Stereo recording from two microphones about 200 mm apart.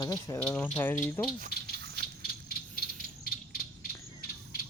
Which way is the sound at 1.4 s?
50° right (ahead or behind).